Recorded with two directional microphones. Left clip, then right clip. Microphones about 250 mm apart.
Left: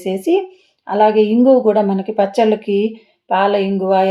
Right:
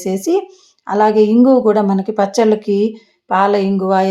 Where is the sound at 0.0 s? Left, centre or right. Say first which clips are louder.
Even; centre.